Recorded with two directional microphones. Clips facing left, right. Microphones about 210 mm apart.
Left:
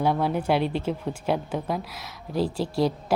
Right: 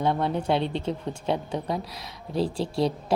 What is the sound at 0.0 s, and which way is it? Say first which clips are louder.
Speech: left 1 dB; 5° left (ahead or behind).